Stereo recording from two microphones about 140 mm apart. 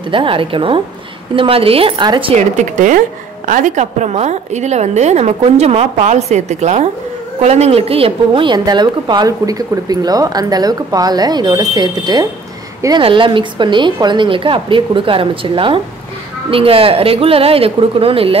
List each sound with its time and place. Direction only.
0.1 s a woman's voice: 40° right (ahead or behind)
2.3 s a woman's voice: 60° right (ahead or behind); by 18.4 s 40° right (ahead or behind)